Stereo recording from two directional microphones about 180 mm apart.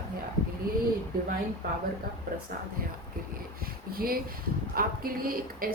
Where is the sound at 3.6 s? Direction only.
55° right (ahead or behind).